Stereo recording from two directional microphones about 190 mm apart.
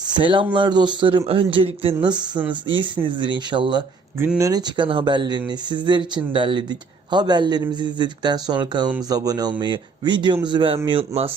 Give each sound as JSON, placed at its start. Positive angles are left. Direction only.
{"t": 0.0, "sound": "speech", "side_deg": -25}
{"t": 4.2, "sound": "speech", "side_deg": -15}